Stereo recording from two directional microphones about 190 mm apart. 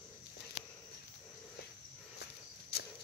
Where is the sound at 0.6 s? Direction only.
30° left (ahead or behind).